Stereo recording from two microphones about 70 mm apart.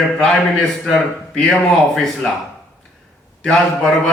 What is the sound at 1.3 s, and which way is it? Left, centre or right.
Speech, centre.